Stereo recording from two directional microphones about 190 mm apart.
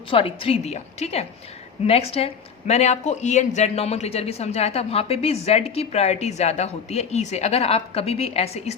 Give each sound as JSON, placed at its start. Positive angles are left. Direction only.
{"t": 0.1, "sound": "speech", "side_deg": 30}